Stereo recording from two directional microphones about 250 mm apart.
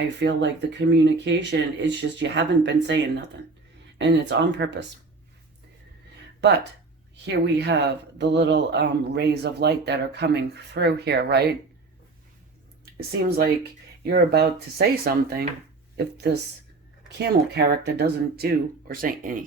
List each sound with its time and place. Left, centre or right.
0.2 s speech: right
7.3 s speech: right
13.0 s speech: right